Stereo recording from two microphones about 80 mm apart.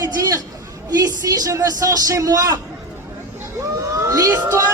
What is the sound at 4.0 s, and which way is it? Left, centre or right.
Emergency vehicle, right.